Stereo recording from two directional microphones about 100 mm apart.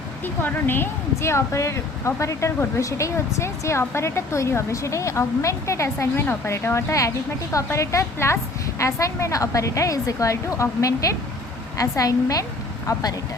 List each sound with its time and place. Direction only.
0.4 s a woman's voice: 20° left (ahead or behind); by 13.1 s 40° left (ahead or behind)